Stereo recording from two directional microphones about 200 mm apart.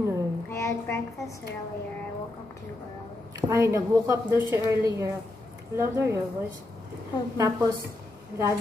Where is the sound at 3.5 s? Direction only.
15° right (ahead or behind).